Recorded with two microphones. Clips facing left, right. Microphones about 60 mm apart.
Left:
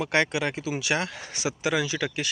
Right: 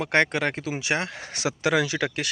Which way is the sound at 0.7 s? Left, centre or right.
Right.